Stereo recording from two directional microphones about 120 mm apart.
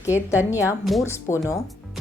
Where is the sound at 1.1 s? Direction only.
25° left (ahead or behind).